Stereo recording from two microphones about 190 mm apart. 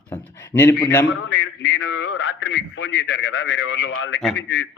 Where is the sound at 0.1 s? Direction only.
10° left (ahead or behind).